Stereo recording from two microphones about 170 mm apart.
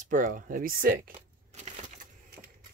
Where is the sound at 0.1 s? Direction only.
50° right (ahead or behind).